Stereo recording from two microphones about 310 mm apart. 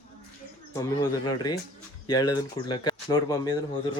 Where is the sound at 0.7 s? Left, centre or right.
Centre.